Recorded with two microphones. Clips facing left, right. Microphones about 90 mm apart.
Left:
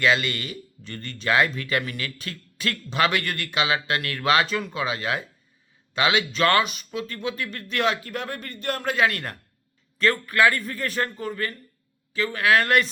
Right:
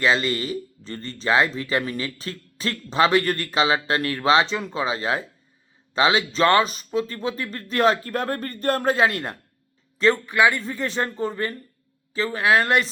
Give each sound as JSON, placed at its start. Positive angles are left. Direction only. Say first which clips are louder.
{"t": 0.0, "sound": "speech", "louder": "right 1 dB", "side_deg": -30}